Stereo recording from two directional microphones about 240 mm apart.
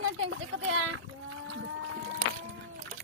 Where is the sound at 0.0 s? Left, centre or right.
Right.